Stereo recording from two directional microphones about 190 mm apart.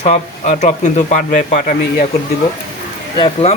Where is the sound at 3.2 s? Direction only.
30° left (ahead or behind).